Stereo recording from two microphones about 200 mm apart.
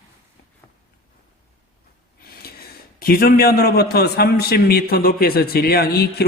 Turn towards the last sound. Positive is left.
turn(degrees=50)  # may be behind; listen again after turning